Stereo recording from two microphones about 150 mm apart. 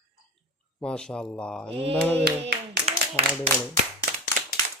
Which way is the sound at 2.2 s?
90° right.